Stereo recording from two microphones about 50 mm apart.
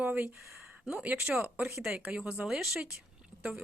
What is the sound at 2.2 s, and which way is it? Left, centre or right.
Speech, right.